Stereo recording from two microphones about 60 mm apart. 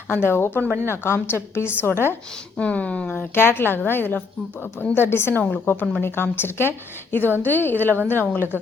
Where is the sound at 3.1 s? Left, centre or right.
Left.